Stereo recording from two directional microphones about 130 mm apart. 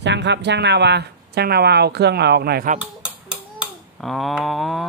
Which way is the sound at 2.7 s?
90° right.